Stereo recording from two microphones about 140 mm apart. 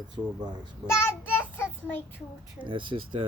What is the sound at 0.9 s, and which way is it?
Child singing, 15° left (ahead or behind).